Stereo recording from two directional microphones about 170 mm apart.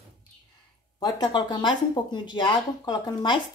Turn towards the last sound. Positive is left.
turn(degrees=25)  # may be behind; listen again after turning